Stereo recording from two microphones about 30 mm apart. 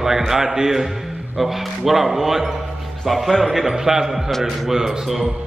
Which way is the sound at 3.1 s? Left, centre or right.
Centre.